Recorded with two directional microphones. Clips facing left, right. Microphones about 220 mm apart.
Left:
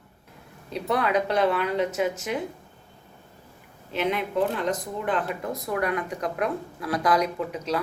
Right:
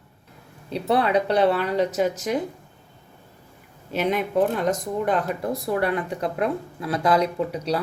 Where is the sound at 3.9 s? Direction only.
40° right (ahead or behind).